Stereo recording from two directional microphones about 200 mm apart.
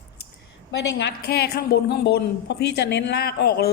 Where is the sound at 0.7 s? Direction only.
60° left (ahead or behind).